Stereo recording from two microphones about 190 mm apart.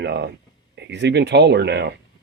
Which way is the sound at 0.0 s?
65° right (ahead or behind).